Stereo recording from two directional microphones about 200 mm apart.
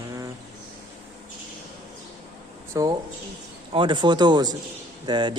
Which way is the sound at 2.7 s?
15° right (ahead or behind).